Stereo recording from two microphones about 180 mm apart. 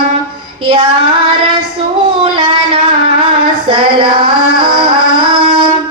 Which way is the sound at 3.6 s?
30° right (ahead or behind).